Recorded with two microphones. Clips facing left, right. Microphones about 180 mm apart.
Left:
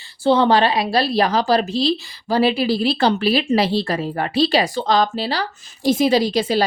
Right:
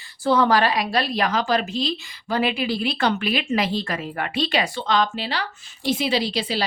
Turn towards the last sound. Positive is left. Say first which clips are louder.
# left 7 dB
turn(degrees=45)  # may be behind; listen again after turning